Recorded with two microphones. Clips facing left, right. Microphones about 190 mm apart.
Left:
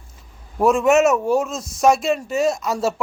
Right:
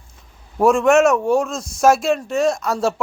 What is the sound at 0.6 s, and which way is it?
Speech, centre (ahead or behind).